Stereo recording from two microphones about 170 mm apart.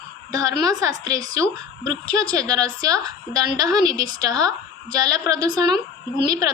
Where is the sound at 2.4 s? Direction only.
20° right (ahead or behind).